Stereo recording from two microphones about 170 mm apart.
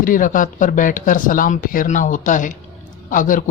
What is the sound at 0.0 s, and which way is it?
Speech, 50° left (ahead or behind).